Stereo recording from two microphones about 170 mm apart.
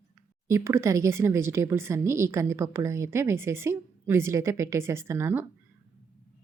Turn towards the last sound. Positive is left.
turn(degrees=-15)  # may be behind; listen again after turning